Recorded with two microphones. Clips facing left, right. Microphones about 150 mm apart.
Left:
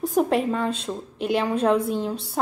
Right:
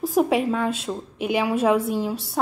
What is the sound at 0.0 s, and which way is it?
A woman's voice, centre (ahead or behind).